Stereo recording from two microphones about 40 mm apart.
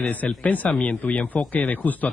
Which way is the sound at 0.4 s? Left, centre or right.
Left.